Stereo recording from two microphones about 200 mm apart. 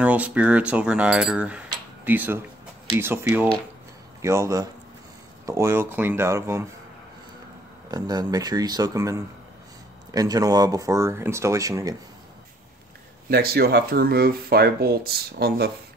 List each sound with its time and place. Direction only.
0.0 s speech: 5° right (ahead or behind)
7.9 s speech: 20° right (ahead or behind)
13.3 s speech: 50° right (ahead or behind)